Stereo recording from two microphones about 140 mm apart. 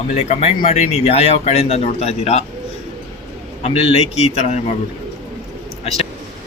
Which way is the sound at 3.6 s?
45° left (ahead or behind).